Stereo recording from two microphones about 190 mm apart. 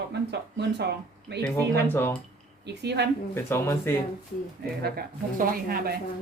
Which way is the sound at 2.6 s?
60° right (ahead or behind).